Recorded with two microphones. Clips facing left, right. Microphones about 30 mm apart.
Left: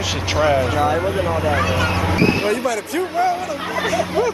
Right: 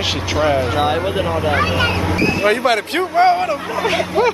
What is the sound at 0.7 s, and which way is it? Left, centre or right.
Speech, right.